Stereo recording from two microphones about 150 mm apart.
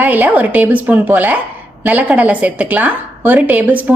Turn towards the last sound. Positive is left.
turn(degrees=-10)  # may be behind; listen again after turning